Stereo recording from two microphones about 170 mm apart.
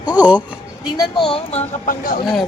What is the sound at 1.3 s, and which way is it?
Speech, 40° left (ahead or behind).